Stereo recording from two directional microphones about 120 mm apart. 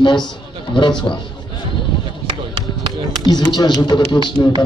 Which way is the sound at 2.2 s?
50° right (ahead or behind).